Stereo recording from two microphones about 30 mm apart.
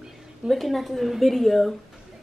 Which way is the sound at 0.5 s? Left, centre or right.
Centre.